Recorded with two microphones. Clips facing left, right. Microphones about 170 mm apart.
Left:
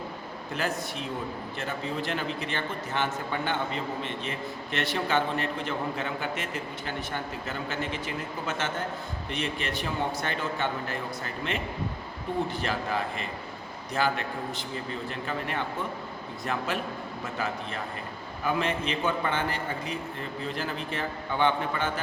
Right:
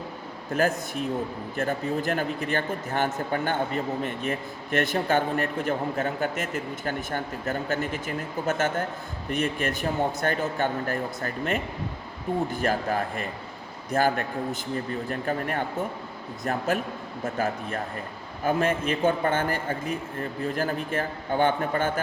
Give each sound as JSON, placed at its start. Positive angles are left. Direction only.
{"t": 0.5, "sound": "speech", "side_deg": -45}